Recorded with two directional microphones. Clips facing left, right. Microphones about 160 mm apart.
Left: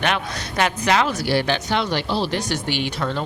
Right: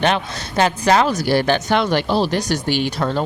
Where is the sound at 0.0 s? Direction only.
30° right (ahead or behind).